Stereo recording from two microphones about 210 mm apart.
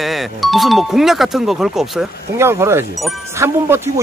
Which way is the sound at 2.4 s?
10° right (ahead or behind).